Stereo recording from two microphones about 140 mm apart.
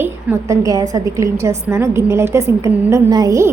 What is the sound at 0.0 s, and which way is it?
A woman's voice, 20° right (ahead or behind).